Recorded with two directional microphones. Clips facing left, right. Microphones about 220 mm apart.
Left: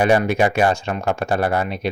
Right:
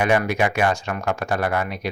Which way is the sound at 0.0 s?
30° left (ahead or behind).